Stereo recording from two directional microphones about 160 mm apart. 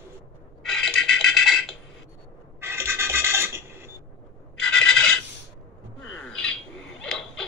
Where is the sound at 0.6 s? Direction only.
Centre (ahead or behind).